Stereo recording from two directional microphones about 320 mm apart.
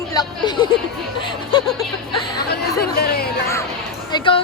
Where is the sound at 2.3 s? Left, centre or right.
Left.